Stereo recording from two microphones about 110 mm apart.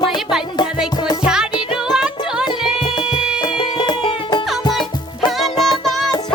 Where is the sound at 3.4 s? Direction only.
45° left (ahead or behind).